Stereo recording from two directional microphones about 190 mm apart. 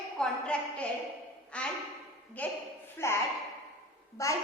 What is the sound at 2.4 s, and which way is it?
Child singing, 10° left (ahead or behind).